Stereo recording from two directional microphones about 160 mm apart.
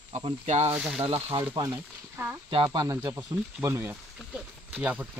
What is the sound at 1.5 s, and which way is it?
Speech, 25° right (ahead or behind).